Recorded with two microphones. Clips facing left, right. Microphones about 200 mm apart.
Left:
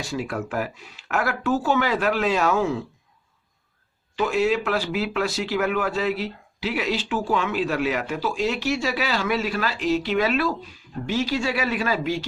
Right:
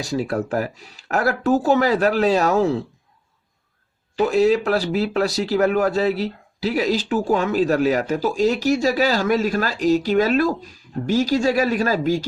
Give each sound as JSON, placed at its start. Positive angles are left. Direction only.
{"t": 0.0, "sound": "speech", "side_deg": -35}
{"t": 4.1, "sound": "speech", "side_deg": -40}